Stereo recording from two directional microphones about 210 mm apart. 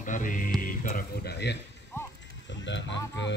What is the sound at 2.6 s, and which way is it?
Speech, 60° left (ahead or behind).